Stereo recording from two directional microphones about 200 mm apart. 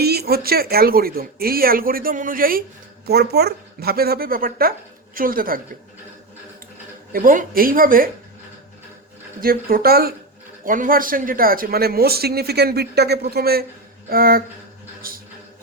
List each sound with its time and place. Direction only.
0.0 s speech: 50° right (ahead or behind)
7.1 s speech: 45° right (ahead or behind)
9.4 s speech: 50° right (ahead or behind)
15.0 s a sound: 45° right (ahead or behind)